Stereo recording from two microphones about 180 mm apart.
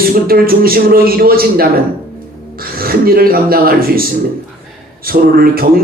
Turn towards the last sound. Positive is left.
turn(degrees=-55)  # may be behind; listen again after turning